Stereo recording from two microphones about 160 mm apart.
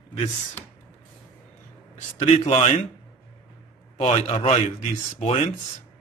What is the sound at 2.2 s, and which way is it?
Speech, 45° left (ahead or behind).